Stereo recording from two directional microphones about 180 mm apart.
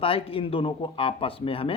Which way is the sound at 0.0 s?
30° left (ahead or behind).